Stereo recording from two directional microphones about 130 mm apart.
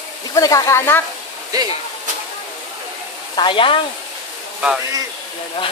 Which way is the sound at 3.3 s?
40° left (ahead or behind).